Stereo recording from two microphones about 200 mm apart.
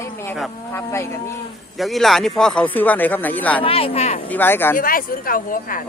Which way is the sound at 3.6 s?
30° left (ahead or behind).